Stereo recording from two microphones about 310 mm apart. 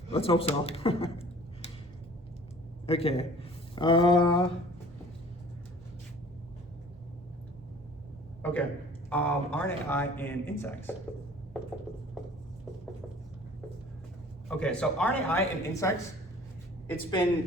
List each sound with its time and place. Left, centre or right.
0.1 s speech: centre
2.8 s speech: centre
9.0 s speech: centre
14.4 s speech: centre